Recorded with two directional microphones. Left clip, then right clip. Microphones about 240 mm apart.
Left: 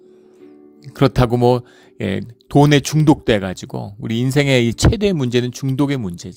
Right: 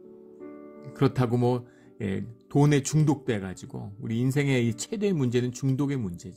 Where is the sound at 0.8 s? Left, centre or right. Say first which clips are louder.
Left 10 dB; left.